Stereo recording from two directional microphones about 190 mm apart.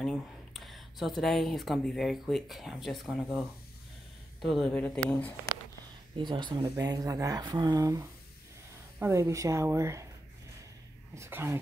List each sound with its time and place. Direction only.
0.0 s speech: centre (ahead or behind)
6.1 s a woman's voice: 25° right (ahead or behind)
11.1 s a woman's voice: 15° right (ahead or behind)